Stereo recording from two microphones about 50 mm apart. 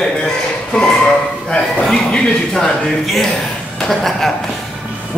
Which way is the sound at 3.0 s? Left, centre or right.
Centre.